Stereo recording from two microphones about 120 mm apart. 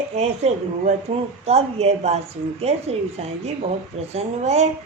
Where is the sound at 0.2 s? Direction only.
65° right (ahead or behind).